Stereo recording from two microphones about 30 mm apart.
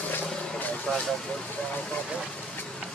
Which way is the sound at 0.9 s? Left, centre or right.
Centre.